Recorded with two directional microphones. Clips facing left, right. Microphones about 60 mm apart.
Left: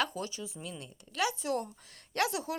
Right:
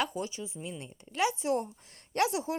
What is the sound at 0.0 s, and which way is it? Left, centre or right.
A woman's voice, right.